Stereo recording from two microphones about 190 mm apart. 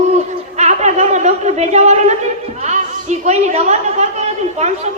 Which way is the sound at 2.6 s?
35° right (ahead or behind).